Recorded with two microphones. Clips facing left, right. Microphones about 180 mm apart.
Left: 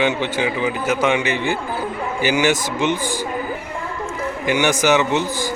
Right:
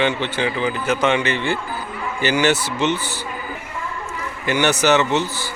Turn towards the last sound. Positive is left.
turn(degrees=10)  # may be behind; listen again after turning